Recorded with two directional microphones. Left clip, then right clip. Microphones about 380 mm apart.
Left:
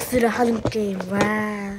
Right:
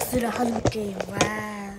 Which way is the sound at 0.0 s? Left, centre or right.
Centre.